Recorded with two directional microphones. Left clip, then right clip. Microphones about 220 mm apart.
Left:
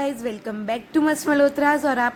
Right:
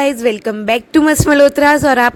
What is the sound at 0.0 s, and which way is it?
A woman's voice, 35° right (ahead or behind).